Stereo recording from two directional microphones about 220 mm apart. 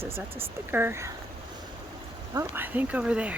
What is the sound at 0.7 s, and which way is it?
Speech, 10° right (ahead or behind).